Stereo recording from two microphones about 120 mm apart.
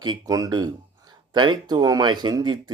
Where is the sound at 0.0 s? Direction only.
35° right (ahead or behind).